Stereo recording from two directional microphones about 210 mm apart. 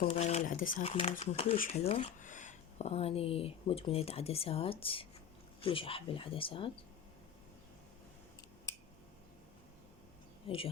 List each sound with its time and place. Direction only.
0.1 s speech: 30° left (ahead or behind)
0.9 s speech: 30° left (ahead or behind)
1.5 s speech: 40° left (ahead or behind)
1.8 s speech: 30° left (ahead or behind)
10.4 s speech: 25° left (ahead or behind)